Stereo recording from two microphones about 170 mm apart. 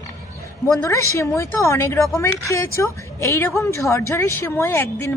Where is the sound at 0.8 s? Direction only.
15° left (ahead or behind).